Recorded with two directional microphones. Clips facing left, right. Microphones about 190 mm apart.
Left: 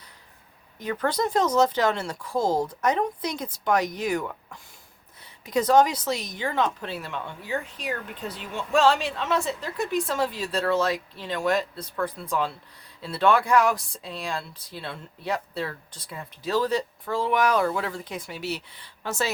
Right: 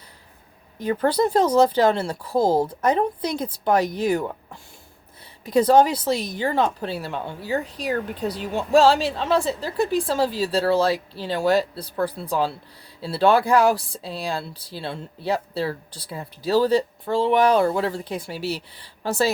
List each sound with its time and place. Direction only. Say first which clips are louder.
0.8 s a woman's voice: right 6 dB; 30° right (ahead or behind)